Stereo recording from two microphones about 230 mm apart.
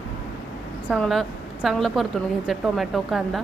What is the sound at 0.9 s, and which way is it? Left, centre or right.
A woman's voice, centre.